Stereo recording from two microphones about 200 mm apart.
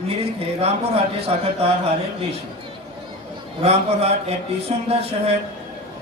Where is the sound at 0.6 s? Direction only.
30° right (ahead or behind).